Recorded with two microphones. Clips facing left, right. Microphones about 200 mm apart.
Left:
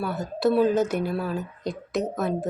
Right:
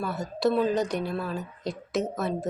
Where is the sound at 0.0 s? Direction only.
Centre (ahead or behind).